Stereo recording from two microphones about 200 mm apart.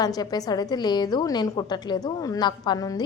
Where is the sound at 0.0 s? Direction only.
20° left (ahead or behind).